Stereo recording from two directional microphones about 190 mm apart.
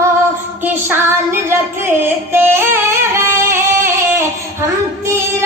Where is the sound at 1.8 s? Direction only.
10° right (ahead or behind).